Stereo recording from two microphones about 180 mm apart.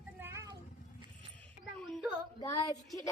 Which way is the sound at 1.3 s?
5° left (ahead or behind).